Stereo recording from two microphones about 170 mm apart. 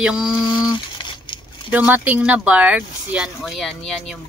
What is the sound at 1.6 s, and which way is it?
Speech, 10° right (ahead or behind).